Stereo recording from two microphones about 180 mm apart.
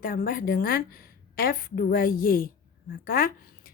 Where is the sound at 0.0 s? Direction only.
50° left (ahead or behind).